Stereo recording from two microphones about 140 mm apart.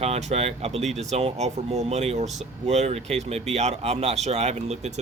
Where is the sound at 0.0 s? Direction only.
50° right (ahead or behind).